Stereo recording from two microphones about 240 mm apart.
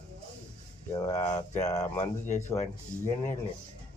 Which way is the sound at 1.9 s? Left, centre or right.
Left.